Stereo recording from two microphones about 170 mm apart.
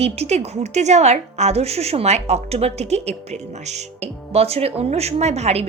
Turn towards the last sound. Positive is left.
turn(degrees=-40)  # may be behind; listen again after turning